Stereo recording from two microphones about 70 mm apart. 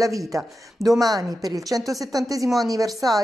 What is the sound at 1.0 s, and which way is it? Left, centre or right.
A woman's voice, right.